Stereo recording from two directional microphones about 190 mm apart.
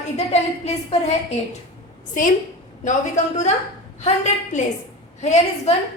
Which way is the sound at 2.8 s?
40° left (ahead or behind).